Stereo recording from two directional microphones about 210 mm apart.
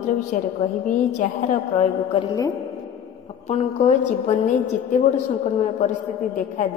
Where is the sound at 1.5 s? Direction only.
25° left (ahead or behind).